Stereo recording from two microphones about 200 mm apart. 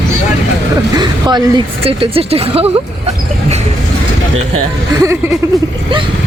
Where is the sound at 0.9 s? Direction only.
20° right (ahead or behind).